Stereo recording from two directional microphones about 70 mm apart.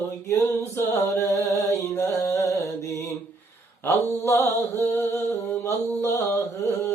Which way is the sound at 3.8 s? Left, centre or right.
Left.